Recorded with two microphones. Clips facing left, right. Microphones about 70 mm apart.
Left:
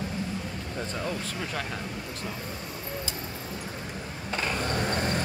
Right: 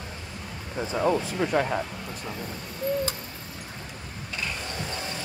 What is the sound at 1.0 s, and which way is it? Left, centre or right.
Speech, right.